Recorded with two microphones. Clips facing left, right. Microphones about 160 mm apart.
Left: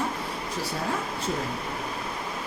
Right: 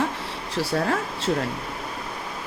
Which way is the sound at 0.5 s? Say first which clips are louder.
Right 7 dB; 75° right (ahead or behind).